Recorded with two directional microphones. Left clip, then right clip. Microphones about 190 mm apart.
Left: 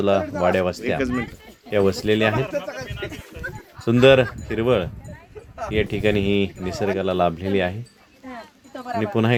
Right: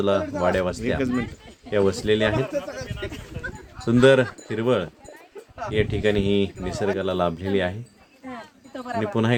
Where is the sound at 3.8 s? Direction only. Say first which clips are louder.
Left 2 dB; 10° left (ahead or behind).